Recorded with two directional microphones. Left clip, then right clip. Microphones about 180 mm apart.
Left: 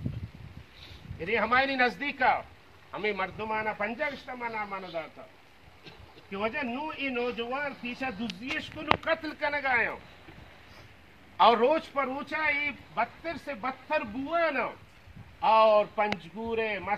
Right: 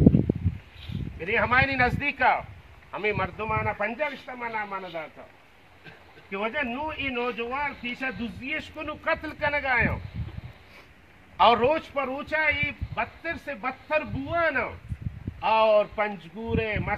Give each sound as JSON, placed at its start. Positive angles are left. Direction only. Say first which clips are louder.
{"t": 1.2, "sound": "a man's voice", "louder": "right 3 dB", "side_deg": 5}
{"t": 6.3, "sound": "speech", "louder": "right 3 dB", "side_deg": 0}
{"t": 11.3, "sound": "speech", "louder": "right 2 dB", "side_deg": -10}